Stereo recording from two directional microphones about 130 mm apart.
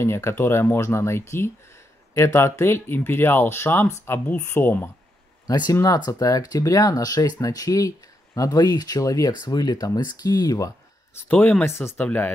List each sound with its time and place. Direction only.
0.0 s speech: 20° left (ahead or behind)
5.5 s speech: 30° left (ahead or behind)
11.1 s speech: 15° left (ahead or behind)